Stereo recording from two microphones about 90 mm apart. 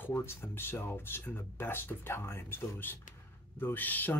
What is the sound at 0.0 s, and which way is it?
Speech, 25° left (ahead or behind).